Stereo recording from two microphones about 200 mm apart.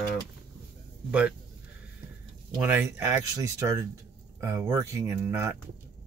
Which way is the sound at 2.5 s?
10° right (ahead or behind).